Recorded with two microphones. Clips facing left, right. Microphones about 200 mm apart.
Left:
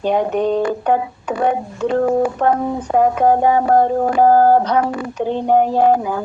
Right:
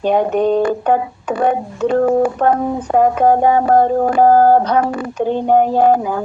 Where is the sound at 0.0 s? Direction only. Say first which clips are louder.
Right 2 dB; 45° right (ahead or behind).